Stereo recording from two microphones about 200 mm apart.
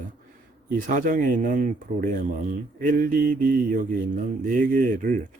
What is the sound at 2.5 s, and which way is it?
Mantra, 45° right (ahead or behind).